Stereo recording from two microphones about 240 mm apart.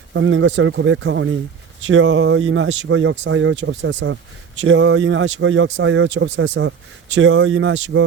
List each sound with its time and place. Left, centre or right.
0.1 s speech: right